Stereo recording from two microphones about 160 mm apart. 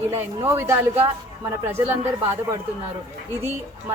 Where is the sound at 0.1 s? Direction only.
15° right (ahead or behind).